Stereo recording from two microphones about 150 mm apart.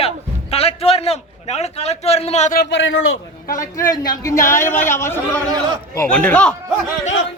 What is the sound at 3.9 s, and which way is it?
A man's voice, 20° left (ahead or behind).